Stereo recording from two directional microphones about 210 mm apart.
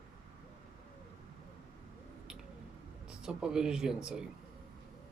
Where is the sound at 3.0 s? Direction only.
5° right (ahead or behind).